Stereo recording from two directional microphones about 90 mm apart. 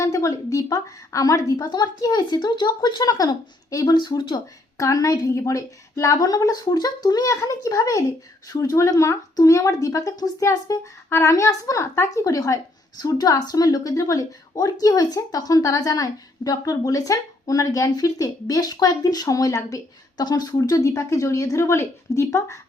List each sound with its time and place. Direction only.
0.0 s speech: 40° left (ahead or behind)
1.5 s speech: 50° left (ahead or behind)
3.8 s speech: 55° left (ahead or behind)
4.8 s speech: 40° left (ahead or behind)